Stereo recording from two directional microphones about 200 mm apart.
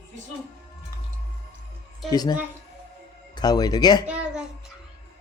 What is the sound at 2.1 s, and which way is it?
Speech, 20° left (ahead or behind).